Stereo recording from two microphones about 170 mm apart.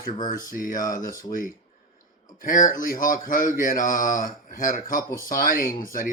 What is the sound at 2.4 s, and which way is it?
Speech, 55° left (ahead or behind).